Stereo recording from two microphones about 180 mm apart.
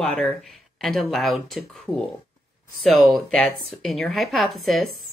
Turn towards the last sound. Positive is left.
turn(degrees=0)  # may be behind; listen again after turning